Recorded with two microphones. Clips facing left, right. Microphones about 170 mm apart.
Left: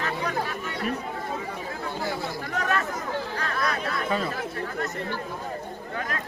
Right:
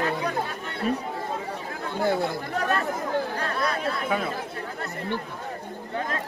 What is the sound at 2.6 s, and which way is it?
Chatter, 35° right (ahead or behind).